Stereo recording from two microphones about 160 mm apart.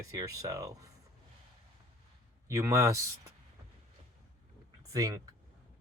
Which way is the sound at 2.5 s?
20° right (ahead or behind).